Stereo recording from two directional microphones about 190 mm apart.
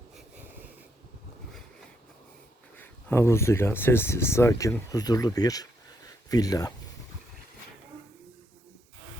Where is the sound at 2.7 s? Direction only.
10° left (ahead or behind).